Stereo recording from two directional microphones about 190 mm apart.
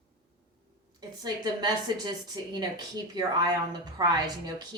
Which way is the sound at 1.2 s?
20° right (ahead or behind).